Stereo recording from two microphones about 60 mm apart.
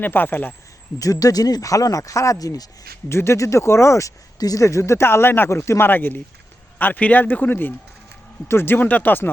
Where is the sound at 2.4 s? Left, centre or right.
Left.